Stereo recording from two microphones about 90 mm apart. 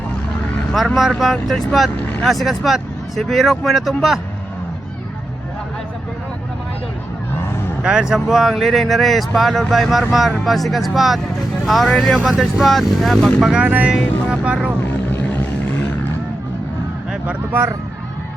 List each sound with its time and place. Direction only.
0.7 s speech: centre (ahead or behind)
7.8 s speech: 10° right (ahead or behind)
13.5 s speech: 15° right (ahead or behind)
15.1 s vehicle: 20° left (ahead or behind)